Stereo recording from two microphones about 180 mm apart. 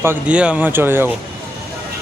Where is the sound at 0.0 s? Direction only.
10° right (ahead or behind).